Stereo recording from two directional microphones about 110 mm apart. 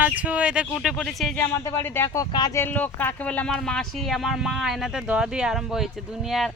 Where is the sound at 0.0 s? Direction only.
10° right (ahead or behind).